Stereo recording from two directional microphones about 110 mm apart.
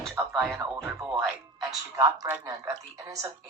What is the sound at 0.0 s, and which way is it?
Music, 5° left (ahead or behind).